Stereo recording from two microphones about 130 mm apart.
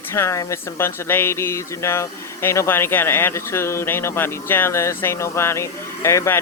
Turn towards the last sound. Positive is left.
turn(degrees=20)  # may be behind; listen again after turning